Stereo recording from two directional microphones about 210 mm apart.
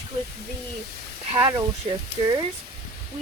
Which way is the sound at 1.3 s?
20° right (ahead or behind).